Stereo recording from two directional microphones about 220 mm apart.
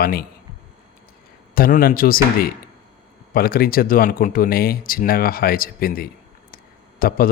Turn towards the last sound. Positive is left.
turn(degrees=40)  # may be behind; listen again after turning